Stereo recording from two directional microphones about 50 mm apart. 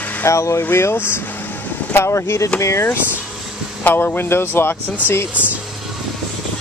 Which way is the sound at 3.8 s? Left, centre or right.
Left.